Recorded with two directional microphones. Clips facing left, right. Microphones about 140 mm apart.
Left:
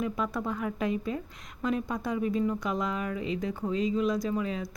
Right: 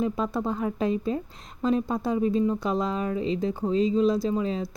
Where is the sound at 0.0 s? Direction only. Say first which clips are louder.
Right 4 dB; 30° right (ahead or behind).